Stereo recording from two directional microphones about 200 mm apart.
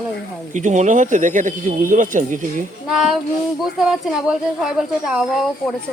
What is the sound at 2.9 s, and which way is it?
Speech, centre (ahead or behind).